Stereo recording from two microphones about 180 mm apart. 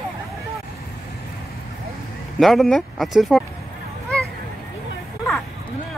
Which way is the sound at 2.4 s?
Centre (ahead or behind).